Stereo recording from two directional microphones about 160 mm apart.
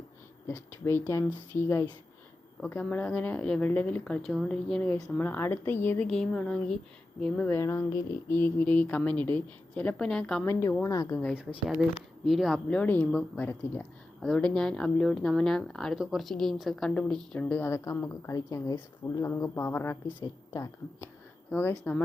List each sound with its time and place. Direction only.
0.4 s speech: 15° left (ahead or behind)
10.4 s speech: 15° left (ahead or behind)
11.7 s speech: centre (ahead or behind); by 21.1 s 20° left (ahead or behind)
21.5 s speech: 10° left (ahead or behind)